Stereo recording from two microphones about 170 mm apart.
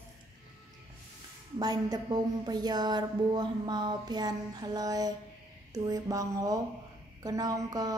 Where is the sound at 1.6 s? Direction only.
25° right (ahead or behind).